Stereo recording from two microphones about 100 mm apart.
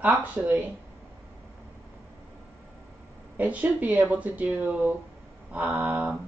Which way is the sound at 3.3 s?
15° right (ahead or behind).